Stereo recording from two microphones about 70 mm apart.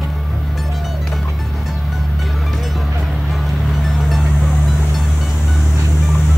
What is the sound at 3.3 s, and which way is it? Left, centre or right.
Music, centre.